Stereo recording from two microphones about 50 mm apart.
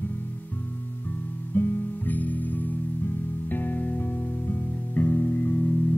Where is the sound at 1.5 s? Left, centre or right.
Left.